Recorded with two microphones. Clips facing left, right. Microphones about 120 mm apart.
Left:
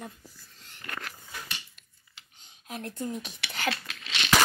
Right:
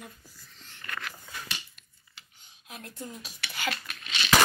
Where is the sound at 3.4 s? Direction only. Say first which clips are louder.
Left 1 dB; 90° left.